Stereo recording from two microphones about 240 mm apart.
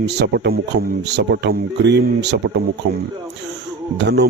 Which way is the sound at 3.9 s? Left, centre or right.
Right.